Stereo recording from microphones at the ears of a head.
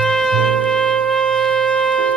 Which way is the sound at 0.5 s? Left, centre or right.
Right.